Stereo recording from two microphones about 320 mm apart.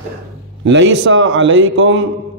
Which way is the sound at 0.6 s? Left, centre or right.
Right.